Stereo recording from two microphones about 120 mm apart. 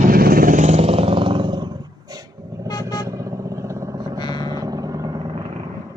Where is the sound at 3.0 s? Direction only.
25° right (ahead or behind).